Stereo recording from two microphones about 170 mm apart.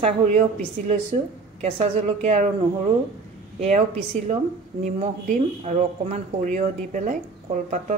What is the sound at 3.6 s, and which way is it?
Speech, 40° right (ahead or behind).